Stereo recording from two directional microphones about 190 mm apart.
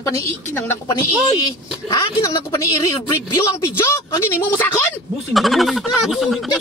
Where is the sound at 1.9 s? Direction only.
20° left (ahead or behind).